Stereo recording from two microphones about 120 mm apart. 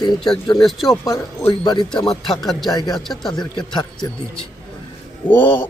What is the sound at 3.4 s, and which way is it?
Speech, 35° left (ahead or behind).